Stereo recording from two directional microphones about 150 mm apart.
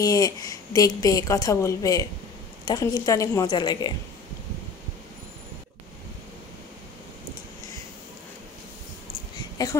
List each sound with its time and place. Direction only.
0.0 s a woman's voice: 25° left (ahead or behind)
9.6 s a woman's voice: 25° left (ahead or behind)